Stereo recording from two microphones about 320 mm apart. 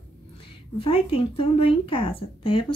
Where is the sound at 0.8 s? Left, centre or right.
Centre.